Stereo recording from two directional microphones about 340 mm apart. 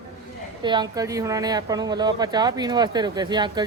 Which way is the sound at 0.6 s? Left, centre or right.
Centre.